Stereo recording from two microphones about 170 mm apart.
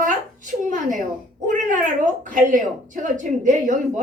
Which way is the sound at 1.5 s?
50° right (ahead or behind).